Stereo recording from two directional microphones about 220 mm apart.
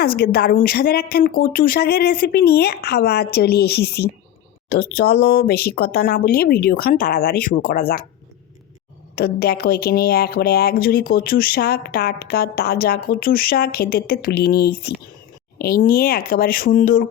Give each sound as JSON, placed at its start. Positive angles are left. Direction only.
{"t": 0.0, "sound": "speech", "side_deg": 45}
{"t": 9.1, "sound": "speech", "side_deg": 45}